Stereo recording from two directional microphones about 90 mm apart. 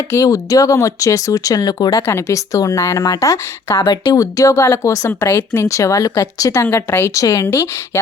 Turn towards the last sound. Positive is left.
turn(degrees=30)  # may be behind; listen again after turning